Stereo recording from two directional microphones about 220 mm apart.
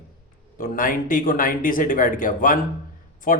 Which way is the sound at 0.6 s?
40° left (ahead or behind).